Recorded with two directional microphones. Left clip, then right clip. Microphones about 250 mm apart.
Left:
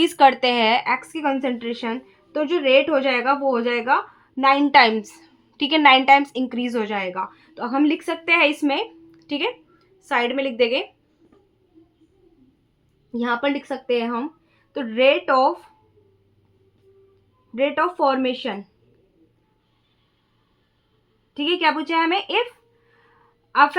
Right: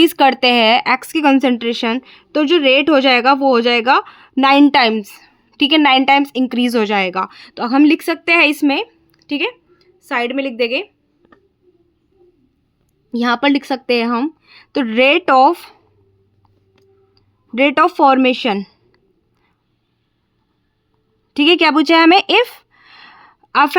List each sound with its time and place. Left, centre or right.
0.0 s speech: right
13.1 s speech: right
17.5 s speech: right
21.3 s a sound: right